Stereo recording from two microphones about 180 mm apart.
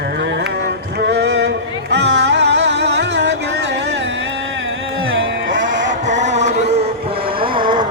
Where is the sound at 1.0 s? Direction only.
70° right (ahead or behind).